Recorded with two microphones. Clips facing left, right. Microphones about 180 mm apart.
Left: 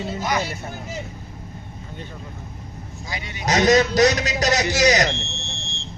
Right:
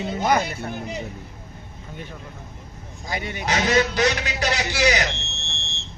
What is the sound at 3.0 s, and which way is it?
Speech, 50° right (ahead or behind).